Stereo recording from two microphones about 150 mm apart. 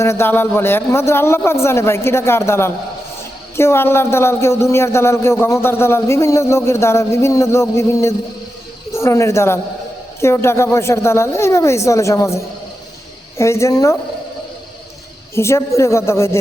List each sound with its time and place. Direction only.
0.0 s a man's voice: 15° left (ahead or behind)
15.4 s a man's voice: 20° left (ahead or behind)